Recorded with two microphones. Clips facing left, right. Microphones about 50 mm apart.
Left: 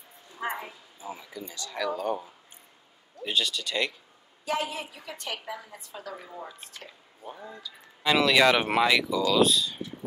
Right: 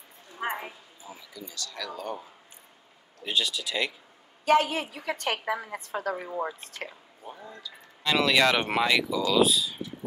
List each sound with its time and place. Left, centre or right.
1.0 s speech: left
1.9 s speech: centre
3.3 s speech: centre
4.5 s a woman's voice: right
7.2 s speech: centre